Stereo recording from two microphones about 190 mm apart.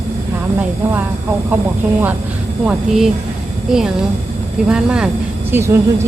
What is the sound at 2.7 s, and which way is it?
Speech, centre (ahead or behind).